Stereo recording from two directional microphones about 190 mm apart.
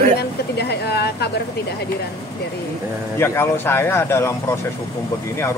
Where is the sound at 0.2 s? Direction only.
60° left (ahead or behind).